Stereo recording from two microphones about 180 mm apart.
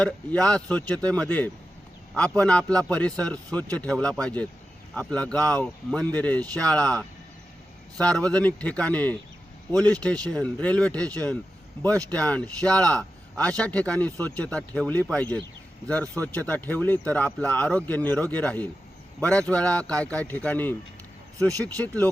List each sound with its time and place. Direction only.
0.0 s a man's voice: 5° left (ahead or behind)
21.3 s speech: 20° right (ahead or behind)
21.8 s a man's voice: 10° left (ahead or behind)